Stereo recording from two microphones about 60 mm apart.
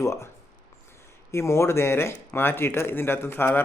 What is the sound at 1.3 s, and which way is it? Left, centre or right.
A man's voice, left.